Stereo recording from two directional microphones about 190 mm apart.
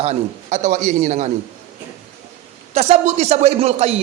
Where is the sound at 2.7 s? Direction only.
35° right (ahead or behind).